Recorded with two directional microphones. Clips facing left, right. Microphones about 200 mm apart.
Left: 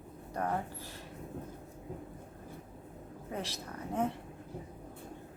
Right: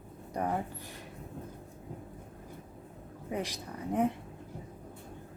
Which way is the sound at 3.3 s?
15° right (ahead or behind).